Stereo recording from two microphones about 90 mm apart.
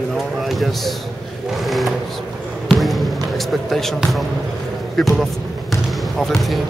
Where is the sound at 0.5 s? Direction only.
Centre (ahead or behind).